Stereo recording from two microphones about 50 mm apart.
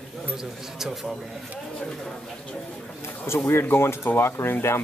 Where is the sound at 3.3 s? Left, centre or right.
Left.